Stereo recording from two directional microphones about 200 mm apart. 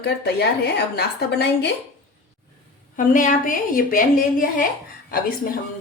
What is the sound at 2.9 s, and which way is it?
A woman's voice, 40° left (ahead or behind).